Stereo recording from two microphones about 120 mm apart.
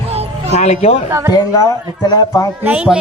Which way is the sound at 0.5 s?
65° left (ahead or behind).